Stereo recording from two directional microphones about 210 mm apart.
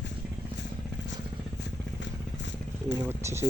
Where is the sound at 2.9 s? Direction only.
15° right (ahead or behind).